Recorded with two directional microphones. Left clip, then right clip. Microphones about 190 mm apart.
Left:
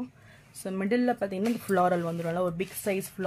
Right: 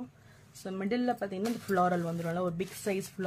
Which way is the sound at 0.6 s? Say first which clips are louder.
Left 5 dB; 35° left (ahead or behind).